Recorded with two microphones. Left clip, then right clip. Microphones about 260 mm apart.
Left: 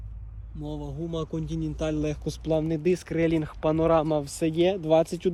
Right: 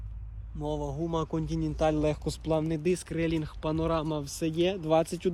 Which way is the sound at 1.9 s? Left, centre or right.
Centre.